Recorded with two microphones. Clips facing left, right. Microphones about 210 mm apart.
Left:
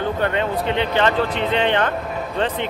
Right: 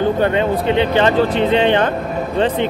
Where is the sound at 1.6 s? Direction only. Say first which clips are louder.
Right 3 dB; 30° right (ahead or behind).